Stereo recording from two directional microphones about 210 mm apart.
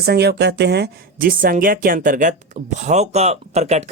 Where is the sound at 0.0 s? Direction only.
50° right (ahead or behind).